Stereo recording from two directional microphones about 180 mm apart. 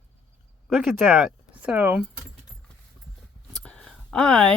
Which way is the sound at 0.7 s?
Centre (ahead or behind).